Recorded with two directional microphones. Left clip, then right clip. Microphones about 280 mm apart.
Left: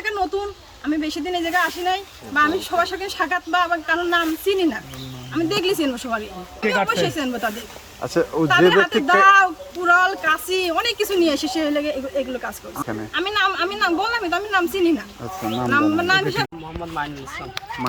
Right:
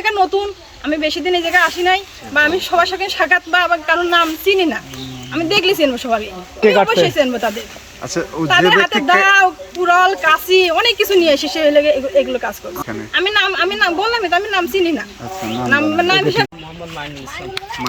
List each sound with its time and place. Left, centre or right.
0.0 s a sound: centre
0.9 s speech: centre
8.0 s speech: left
9.0 s speech: centre
12.7 s speech: left
13.1 s speech: centre